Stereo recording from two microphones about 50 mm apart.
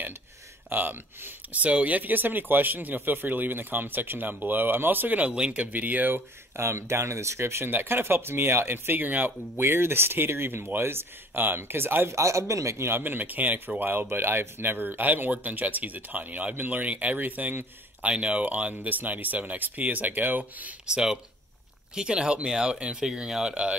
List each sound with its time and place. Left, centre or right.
0.7 s speech: right
6.5 s speech: right
7.7 s speech: right
9.6 s speech: right
12.1 s speech: right
12.8 s speech: right
18.1 s speech: right
20.9 s speech: centre